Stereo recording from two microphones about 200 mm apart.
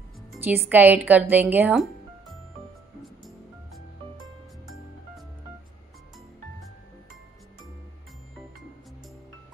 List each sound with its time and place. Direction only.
0.3 s speech: 10° right (ahead or behind)